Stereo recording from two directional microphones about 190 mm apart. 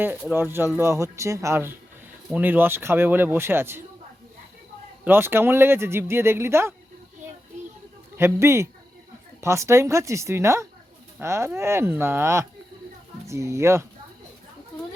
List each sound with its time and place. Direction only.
0.0 s speech: 10° right (ahead or behind)
5.0 s speech: 10° right (ahead or behind)
8.1 s speech: 15° right (ahead or behind)